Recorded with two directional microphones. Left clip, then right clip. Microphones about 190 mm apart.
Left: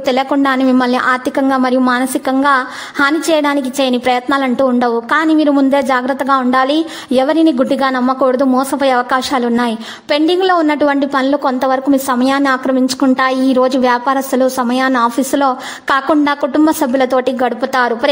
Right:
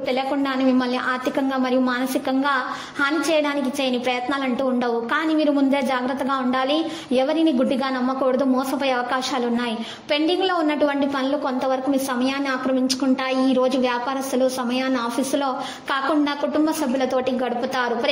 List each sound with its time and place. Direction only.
0.0 s a woman's voice: 45° left (ahead or behind)